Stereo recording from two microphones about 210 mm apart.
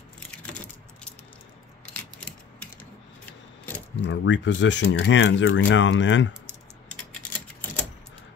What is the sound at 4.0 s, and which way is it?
Speech, 60° left (ahead or behind).